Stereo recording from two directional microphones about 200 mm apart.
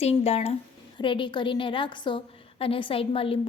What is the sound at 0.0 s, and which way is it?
A woman's voice, 30° left (ahead or behind).